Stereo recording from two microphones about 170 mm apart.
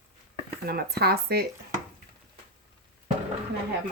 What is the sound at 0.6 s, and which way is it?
Speech, 65° right (ahead or behind).